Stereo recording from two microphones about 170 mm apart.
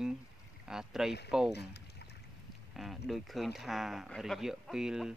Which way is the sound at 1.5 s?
75° left (ahead or behind).